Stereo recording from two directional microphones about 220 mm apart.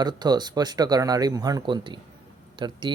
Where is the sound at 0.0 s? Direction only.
20° right (ahead or behind).